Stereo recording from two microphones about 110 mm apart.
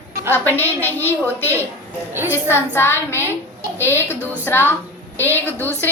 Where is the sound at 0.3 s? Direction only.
20° left (ahead or behind).